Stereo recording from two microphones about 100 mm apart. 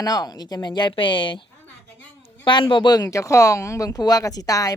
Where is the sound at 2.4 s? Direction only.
55° left (ahead or behind).